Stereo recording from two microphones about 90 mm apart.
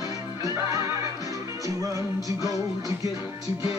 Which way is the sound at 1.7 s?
40° right (ahead or behind).